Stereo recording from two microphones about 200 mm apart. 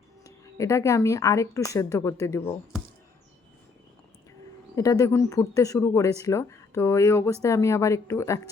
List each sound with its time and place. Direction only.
0.5 s speech: 15° left (ahead or behind)
4.7 s speech: 15° left (ahead or behind)